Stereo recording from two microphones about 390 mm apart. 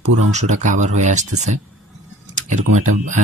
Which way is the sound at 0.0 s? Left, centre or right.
Right.